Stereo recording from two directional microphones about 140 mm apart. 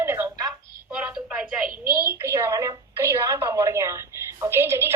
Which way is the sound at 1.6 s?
90° right.